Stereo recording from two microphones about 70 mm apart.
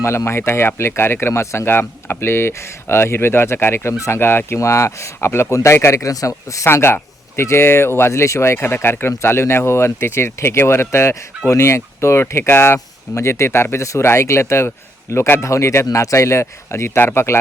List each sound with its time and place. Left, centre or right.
0.3 s speech: left
3.9 s speech: left
4.2 s speech: left
6.7 s speech: left
8.5 s speech: left